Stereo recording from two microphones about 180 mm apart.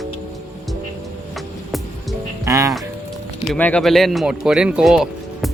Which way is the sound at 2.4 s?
15° right (ahead or behind).